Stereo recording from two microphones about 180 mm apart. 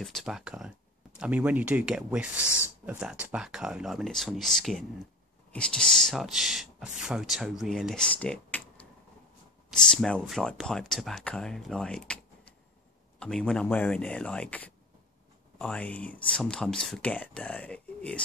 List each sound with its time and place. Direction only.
0.0 s speech: centre (ahead or behind)
9.8 s speech: 5° left (ahead or behind)